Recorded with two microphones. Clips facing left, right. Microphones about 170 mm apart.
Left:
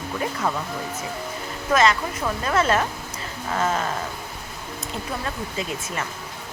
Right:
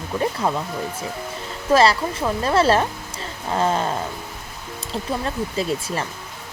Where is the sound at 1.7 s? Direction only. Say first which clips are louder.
Right 3 dB; 35° right (ahead or behind).